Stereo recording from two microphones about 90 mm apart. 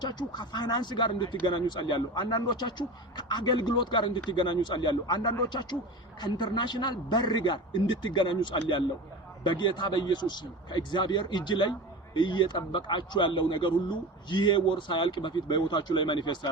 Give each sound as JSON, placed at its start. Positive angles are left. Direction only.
{"t": 0.0, "sound": "speech", "side_deg": 55}